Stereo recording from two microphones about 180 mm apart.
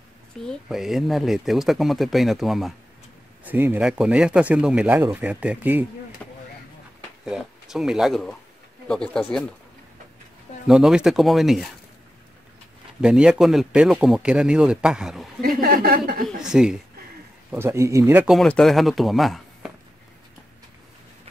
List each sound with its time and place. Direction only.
0.5 s speech: centre (ahead or behind)
6.2 s vehicle: 5° left (ahead or behind)
7.2 s speech: 5° right (ahead or behind)
10.7 s speech: 5° right (ahead or behind)
13.0 s speech: 5° right (ahead or behind)
15.4 s a sound: 55° right (ahead or behind)
16.3 s speech: 5° right (ahead or behind)
18.3 s speech: centre (ahead or behind)